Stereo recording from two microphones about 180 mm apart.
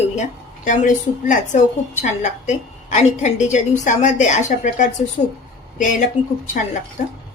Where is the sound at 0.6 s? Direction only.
45° left (ahead or behind).